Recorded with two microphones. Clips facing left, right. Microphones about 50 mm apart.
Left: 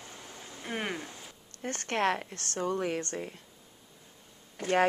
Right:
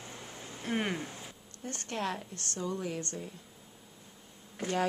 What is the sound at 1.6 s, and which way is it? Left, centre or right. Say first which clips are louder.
A woman's voice: left 7 dB; left.